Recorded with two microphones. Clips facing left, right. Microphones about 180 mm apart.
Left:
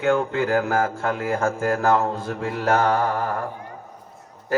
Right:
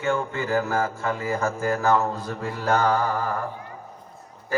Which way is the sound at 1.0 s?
55° left (ahead or behind).